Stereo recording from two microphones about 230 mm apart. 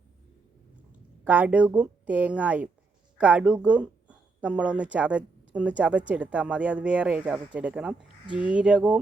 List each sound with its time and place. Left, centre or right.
1.2 s speech: centre
8.0 s a sound: left
8.4 s speech: centre